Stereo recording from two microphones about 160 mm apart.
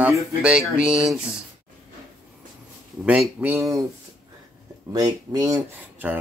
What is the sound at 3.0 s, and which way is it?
Speech, 5° right (ahead or behind).